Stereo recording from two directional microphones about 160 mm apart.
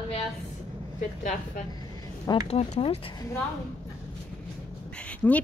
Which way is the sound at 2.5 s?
40° left (ahead or behind).